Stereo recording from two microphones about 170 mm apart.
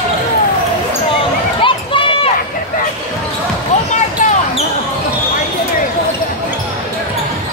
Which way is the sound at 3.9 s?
45° left (ahead or behind).